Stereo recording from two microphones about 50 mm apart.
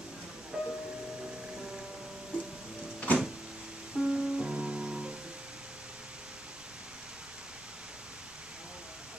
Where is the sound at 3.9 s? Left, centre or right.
Centre.